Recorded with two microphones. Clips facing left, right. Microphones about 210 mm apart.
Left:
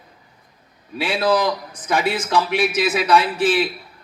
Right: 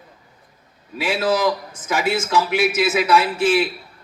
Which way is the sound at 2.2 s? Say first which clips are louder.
Even; 35° left (ahead or behind).